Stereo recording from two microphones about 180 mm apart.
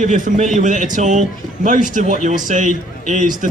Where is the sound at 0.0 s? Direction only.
45° right (ahead or behind).